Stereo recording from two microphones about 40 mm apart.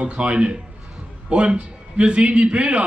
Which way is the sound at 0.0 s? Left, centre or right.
Right.